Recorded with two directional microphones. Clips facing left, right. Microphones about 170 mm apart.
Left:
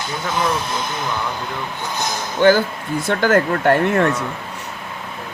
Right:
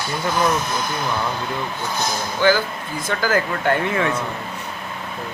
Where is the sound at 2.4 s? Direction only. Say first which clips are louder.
Left 5 dB; 55° left (ahead or behind).